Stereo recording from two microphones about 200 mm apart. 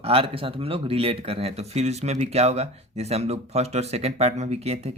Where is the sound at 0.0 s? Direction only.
30° right (ahead or behind).